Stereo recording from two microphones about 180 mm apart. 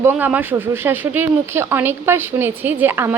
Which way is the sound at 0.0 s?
10° right (ahead or behind).